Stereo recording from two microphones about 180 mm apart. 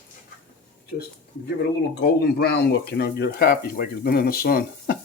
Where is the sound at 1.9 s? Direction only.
60° left (ahead or behind).